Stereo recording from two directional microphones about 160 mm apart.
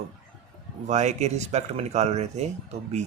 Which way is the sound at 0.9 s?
45° right (ahead or behind).